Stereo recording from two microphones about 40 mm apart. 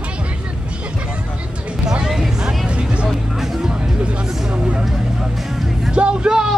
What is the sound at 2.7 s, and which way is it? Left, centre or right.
Vehicle, right.